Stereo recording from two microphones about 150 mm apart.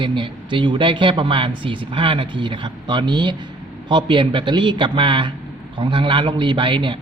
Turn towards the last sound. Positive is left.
turn(degrees=-35)  # may be behind; listen again after turning